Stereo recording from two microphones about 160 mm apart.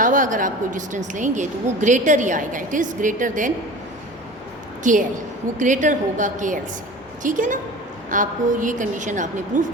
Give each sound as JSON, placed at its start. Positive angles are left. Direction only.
{"t": 0.0, "sound": "a woman's voice", "side_deg": -55}
{"t": 4.8, "sound": "a woman's voice", "side_deg": -55}